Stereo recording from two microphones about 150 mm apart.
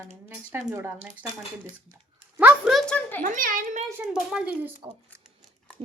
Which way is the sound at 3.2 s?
60° right (ahead or behind).